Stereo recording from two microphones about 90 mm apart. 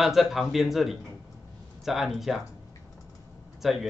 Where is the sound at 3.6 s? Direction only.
Centre (ahead or behind).